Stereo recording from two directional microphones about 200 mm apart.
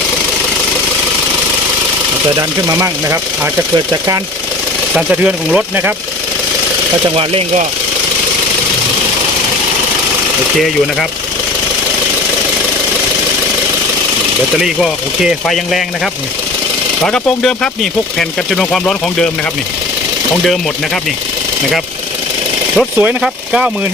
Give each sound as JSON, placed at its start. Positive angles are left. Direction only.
{"t": 2.6, "sound": "speech", "side_deg": -15}
{"t": 4.9, "sound": "speech", "side_deg": -5}
{"t": 7.2, "sound": "speech", "side_deg": -30}
{"t": 14.6, "sound": "speech", "side_deg": 0}
{"t": 17.1, "sound": "speech", "side_deg": 5}
{"t": 20.4, "sound": "speech", "side_deg": 0}
{"t": 23.0, "sound": "speech", "side_deg": -5}